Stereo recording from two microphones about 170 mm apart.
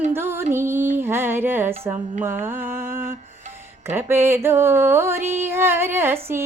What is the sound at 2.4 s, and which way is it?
Mantra, 10° right (ahead or behind).